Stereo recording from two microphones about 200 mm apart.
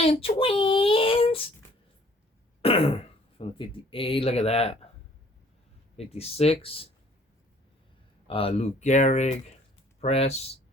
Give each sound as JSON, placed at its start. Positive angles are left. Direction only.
{"t": 0.0, "sound": "speech", "side_deg": 30}
{"t": 2.6, "sound": "speech", "side_deg": 30}
{"t": 6.0, "sound": "speech", "side_deg": 30}
{"t": 8.3, "sound": "speech", "side_deg": 30}